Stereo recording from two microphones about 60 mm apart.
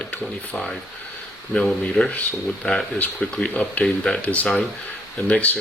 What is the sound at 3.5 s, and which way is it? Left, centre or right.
Speech, left.